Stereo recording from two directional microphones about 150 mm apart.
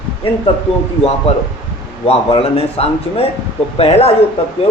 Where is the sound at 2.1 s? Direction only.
40° left (ahead or behind).